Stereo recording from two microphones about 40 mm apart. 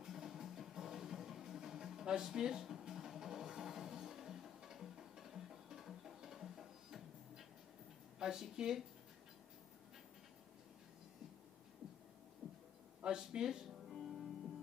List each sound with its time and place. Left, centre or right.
0.0 s music: centre
8.2 s speech: centre
12.4 s a sound: right
13.0 s music: right